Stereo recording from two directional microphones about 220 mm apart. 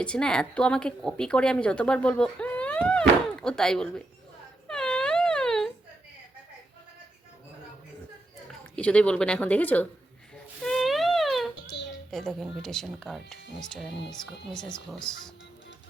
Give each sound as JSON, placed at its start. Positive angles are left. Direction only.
{"t": 0.0, "sound": "a woman's voice", "side_deg": 5}
{"t": 4.7, "sound": "wail", "side_deg": 5}
{"t": 8.7, "sound": "a woman's voice", "side_deg": 5}
{"t": 10.6, "sound": "a sound", "side_deg": 0}
{"t": 11.7, "sound": "a sound", "side_deg": 55}
{"t": 12.1, "sound": "a woman's voice", "side_deg": 0}
{"t": 14.9, "sound": "a woman's voice", "side_deg": 5}